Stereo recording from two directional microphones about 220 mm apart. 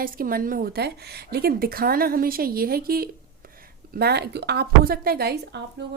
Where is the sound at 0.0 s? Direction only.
40° right (ahead or behind).